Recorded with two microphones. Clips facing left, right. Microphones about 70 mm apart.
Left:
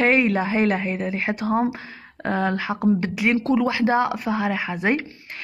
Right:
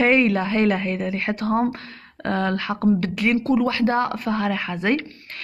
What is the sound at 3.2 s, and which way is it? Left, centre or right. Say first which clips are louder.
Speech: even; left.